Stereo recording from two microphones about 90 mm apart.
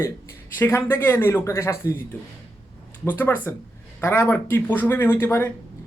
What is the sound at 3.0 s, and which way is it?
Speech, 20° left (ahead or behind).